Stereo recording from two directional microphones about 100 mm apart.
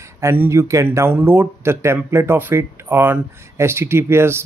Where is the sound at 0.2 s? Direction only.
25° right (ahead or behind).